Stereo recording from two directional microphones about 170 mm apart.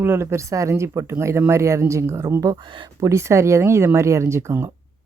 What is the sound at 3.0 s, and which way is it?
Speech, 15° right (ahead or behind).